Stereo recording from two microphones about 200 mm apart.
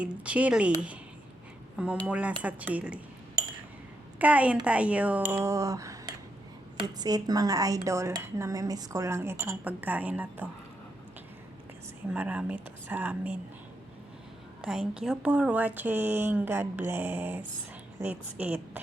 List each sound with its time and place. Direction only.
0.0 s speech: 5° right (ahead or behind)
2.0 s speech: 5° right (ahead or behind)
4.2 s speech: 5° right (ahead or behind)
12.0 s speech: 10° right (ahead or behind)
14.6 s speech: 5° right (ahead or behind)